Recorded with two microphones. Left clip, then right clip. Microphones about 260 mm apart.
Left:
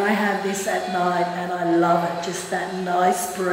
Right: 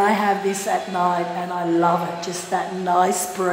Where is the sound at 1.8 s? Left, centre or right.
Centre.